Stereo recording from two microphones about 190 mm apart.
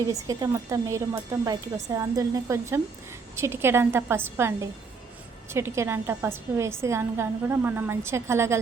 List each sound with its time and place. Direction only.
0.1 s a woman's voice: 15° right (ahead or behind)